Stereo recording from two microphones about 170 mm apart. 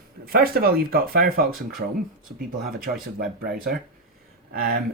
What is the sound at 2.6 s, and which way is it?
Speech, 60° right (ahead or behind).